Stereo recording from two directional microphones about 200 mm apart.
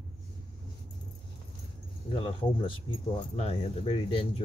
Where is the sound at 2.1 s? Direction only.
25° left (ahead or behind).